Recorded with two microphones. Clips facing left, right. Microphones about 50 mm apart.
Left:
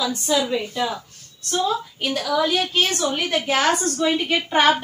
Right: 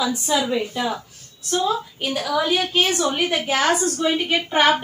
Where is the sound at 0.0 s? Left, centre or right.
Centre.